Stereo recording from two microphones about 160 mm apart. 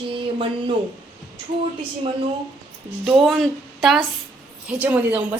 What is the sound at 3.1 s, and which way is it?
Speech, centre (ahead or behind).